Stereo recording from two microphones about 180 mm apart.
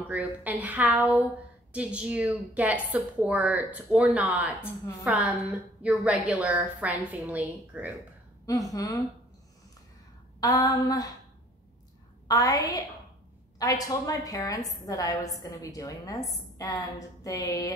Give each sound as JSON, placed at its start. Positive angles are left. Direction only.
{"t": 0.1, "sound": "a woman's voice", "side_deg": -10}
{"t": 8.7, "sound": "a woman's voice", "side_deg": 20}
{"t": 10.4, "sound": "a woman's voice", "side_deg": 20}
{"t": 12.3, "sound": "a woman's voice", "side_deg": 20}